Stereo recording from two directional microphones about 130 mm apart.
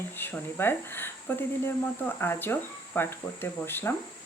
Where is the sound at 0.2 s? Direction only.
15° left (ahead or behind).